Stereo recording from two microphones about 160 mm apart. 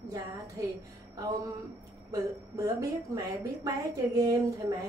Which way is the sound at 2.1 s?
20° right (ahead or behind).